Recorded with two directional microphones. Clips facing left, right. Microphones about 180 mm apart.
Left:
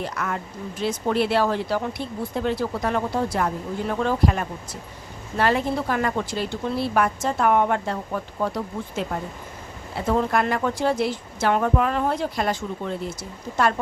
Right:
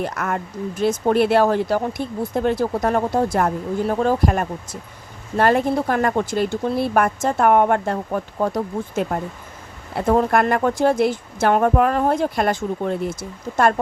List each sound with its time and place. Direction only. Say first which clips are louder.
0.0 s speech: right 4 dB; 50° right (ahead or behind)